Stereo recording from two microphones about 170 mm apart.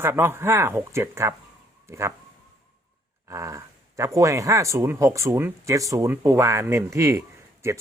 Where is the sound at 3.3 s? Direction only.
20° right (ahead or behind).